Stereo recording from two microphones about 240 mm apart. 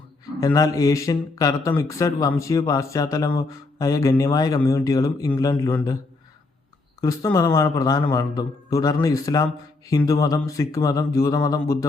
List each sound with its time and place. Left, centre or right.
0.3 s speech: centre
7.0 s speech: centre